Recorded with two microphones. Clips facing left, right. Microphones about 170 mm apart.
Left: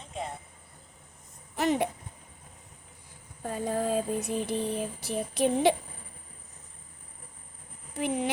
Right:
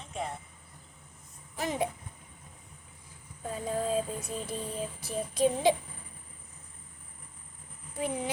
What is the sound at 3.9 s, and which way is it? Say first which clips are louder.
A woman's voice: left 3 dB; 70° left (ahead or behind).